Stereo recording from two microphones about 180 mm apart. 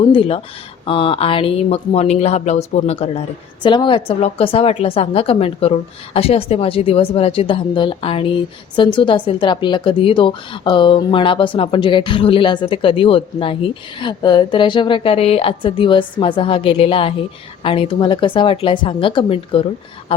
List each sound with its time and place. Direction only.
0.0 s speech: 30° left (ahead or behind)
3.6 s speech: 25° left (ahead or behind)